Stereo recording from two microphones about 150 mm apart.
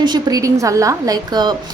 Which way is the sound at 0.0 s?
25° right (ahead or behind).